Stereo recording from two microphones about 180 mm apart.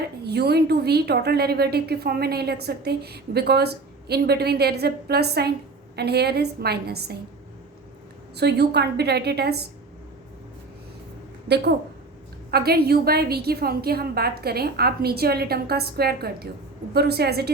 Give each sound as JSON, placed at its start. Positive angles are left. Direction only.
{"t": 0.3, "sound": "a woman's voice", "side_deg": -65}
{"t": 8.4, "sound": "a woman's voice", "side_deg": -65}
{"t": 11.4, "sound": "a woman's voice", "side_deg": -65}